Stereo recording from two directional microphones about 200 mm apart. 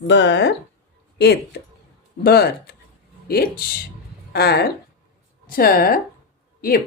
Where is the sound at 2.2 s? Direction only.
50° left (ahead or behind).